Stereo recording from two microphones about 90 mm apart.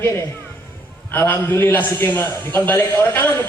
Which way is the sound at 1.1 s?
25° left (ahead or behind).